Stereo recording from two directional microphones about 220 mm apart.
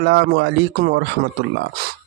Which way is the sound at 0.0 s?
50° right (ahead or behind).